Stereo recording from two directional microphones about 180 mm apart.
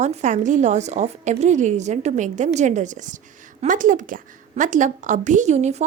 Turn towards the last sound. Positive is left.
turn(degrees=-40)  # may be behind; listen again after turning